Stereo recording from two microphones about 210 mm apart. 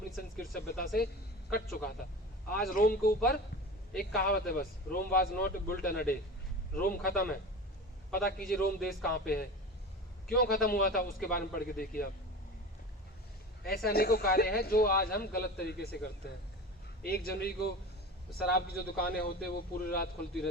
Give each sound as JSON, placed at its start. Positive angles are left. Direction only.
{"t": 0.3, "sound": "a woman's voice", "side_deg": 45}
{"t": 13.6, "sound": "speech", "side_deg": 45}
{"t": 17.0, "sound": "speech", "side_deg": 50}